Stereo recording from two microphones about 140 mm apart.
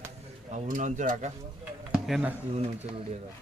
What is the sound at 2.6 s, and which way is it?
Speech, 50° right (ahead or behind).